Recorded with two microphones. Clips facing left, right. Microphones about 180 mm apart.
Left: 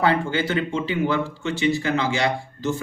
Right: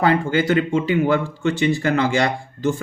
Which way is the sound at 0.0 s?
45° right (ahead or behind).